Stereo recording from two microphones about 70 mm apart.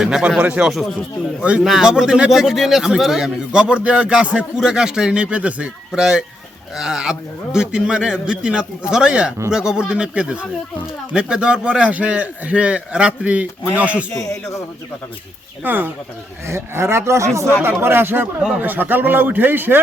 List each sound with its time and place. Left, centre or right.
0.0 s a man's voice: centre
15.6 s a man's voice: right
16.5 s speech: right
17.6 s a man's voice: right